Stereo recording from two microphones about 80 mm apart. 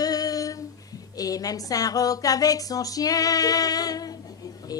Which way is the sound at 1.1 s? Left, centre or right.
Left.